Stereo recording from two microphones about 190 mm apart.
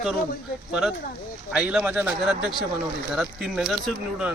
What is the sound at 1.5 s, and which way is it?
Speech, 5° right (ahead or behind).